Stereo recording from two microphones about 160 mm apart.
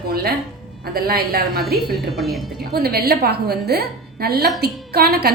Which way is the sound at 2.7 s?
75° right (ahead or behind).